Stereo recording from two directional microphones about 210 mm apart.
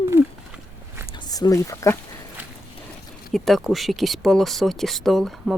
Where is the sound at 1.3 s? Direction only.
15° left (ahead or behind).